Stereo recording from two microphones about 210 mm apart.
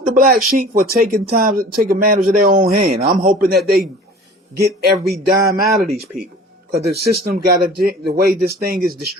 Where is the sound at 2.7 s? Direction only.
30° right (ahead or behind).